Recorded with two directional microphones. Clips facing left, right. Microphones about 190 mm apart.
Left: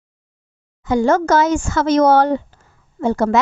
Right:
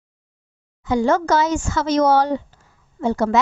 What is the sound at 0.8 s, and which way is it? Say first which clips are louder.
Speech: left 3 dB; 45° left (ahead or behind).